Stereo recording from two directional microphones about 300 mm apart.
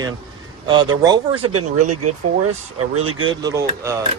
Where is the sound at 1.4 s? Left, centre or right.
Right.